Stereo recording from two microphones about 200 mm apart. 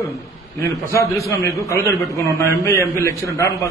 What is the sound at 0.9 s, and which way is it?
A man's voice, 15° left (ahead or behind).